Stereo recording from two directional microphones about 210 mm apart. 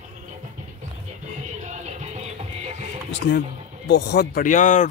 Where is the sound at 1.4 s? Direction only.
35° right (ahead or behind).